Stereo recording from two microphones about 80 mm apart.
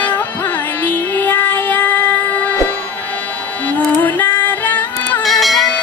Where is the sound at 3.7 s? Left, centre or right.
Left.